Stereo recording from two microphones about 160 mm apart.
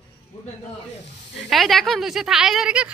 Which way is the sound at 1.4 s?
Centre (ahead or behind).